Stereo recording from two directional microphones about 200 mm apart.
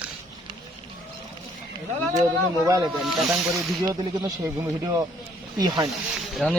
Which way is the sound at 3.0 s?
Centre (ahead or behind).